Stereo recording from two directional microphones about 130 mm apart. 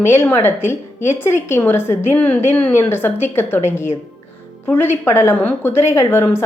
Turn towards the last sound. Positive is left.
turn(degrees=20)  # may be behind; listen again after turning